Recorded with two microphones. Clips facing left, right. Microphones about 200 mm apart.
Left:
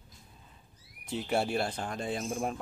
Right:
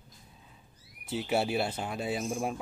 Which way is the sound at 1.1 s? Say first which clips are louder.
Right 1 dB; 5° right (ahead or behind).